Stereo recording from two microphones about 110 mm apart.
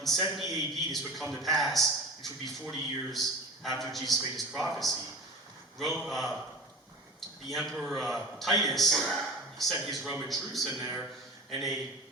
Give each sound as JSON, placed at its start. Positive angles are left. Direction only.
{"t": 0.0, "sound": "a man's voice", "side_deg": 0}
{"t": 9.1, "sound": "a sound", "side_deg": 0}
{"t": 9.8, "sound": "a man's voice", "side_deg": 0}
{"t": 10.7, "sound": "a man's voice", "side_deg": -25}
{"t": 11.5, "sound": "a man's voice", "side_deg": 0}